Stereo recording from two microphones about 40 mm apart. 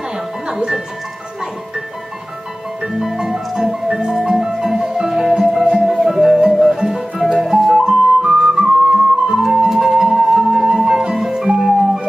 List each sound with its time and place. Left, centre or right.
0.5 s music: centre
2.9 s music: centre